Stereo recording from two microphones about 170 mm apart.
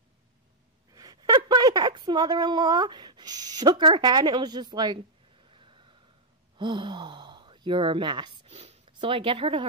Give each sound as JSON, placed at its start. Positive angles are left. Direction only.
{"t": 0.9, "sound": "a woman's voice", "side_deg": -20}
{"t": 5.5, "sound": "a sound", "side_deg": -30}
{"t": 6.6, "sound": "speech", "side_deg": -25}